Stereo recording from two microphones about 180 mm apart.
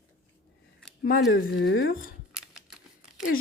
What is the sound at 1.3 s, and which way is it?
Speech, 70° left (ahead or behind).